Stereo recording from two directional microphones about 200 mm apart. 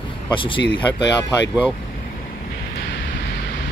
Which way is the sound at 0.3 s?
25° left (ahead or behind).